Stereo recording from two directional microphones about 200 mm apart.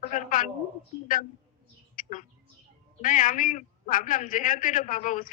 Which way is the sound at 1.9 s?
40° left (ahead or behind).